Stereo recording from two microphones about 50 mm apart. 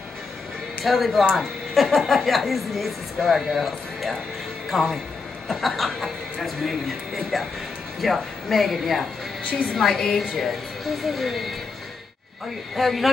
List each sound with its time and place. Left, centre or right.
0.8 s a woman's voice: centre
12.7 s a woman's voice: centre